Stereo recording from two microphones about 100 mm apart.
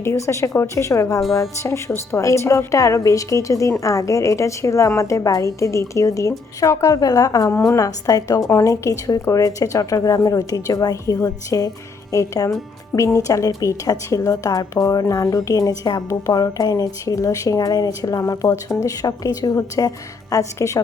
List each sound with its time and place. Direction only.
0.0 s a woman's voice: 30° left (ahead or behind)
1.2 s speech: centre (ahead or behind)
2.1 s a woman's voice: 30° left (ahead or behind)